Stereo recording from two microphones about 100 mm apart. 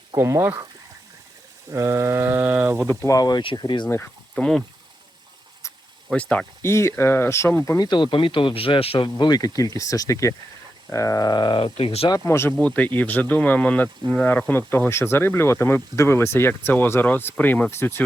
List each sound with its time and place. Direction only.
0.2 s speech: 30° right (ahead or behind)
1.7 s speech: 30° right (ahead or behind)
2.9 s speech: 30° left (ahead or behind)
3.4 s speech: 50° left (ahead or behind)
3.8 s speech: 25° left (ahead or behind)
4.4 s speech: 5° left (ahead or behind)
6.1 s speech: 10° left (ahead or behind)
6.6 s speech: 25° left (ahead or behind)
7.8 s speech: 50° left (ahead or behind); by 9.0 s 70° left (ahead or behind)
9.0 s speech: 50° left (ahead or behind)
11.6 s speech: 80° left
12.0 s speech: 40° left (ahead or behind)
12.3 s speech: 25° left (ahead or behind)
12.5 s speech: 15° left (ahead or behind)